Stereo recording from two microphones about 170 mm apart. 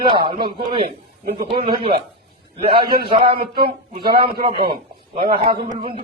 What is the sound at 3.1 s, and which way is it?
A man's voice, 30° right (ahead or behind).